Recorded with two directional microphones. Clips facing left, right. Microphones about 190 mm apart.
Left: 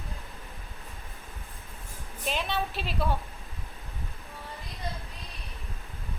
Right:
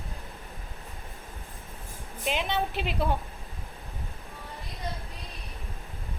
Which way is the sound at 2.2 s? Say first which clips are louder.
Right 2 dB; 15° right (ahead or behind).